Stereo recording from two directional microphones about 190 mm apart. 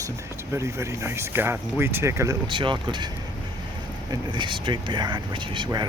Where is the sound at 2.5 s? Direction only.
25° right (ahead or behind).